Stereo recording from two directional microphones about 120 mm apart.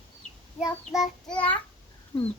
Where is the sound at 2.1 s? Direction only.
30° left (ahead or behind).